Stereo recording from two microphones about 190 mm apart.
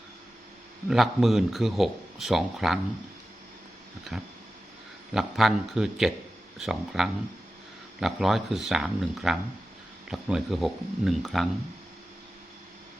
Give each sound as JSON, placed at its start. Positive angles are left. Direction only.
{"t": 0.9, "sound": "speech", "side_deg": 0}
{"t": 4.1, "sound": "speech", "side_deg": 0}